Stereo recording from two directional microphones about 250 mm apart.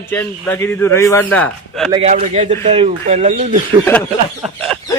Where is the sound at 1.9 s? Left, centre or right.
Right.